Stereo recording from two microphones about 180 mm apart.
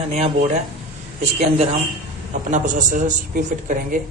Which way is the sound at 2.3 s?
45° right (ahead or behind).